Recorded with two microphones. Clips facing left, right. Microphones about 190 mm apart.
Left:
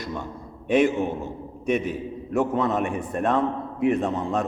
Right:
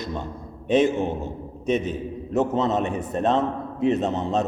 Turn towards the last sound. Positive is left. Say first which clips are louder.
# right 1 dB
turn(degrees=-20)  # may be behind; listen again after turning